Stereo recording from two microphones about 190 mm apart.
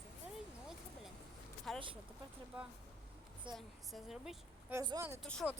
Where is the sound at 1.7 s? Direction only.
Centre (ahead or behind).